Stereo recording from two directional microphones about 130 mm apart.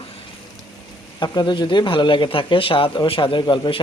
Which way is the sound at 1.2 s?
35° left (ahead or behind).